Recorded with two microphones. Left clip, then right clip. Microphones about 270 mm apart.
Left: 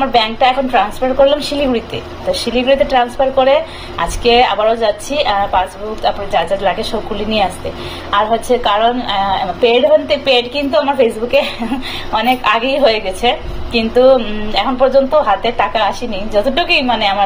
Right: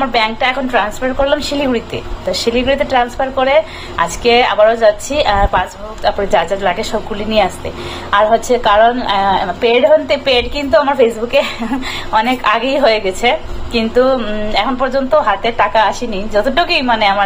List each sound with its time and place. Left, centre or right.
0.1 s a woman's voice: centre